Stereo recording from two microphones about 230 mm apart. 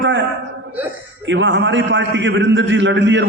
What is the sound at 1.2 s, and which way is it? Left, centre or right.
A man's voice, right.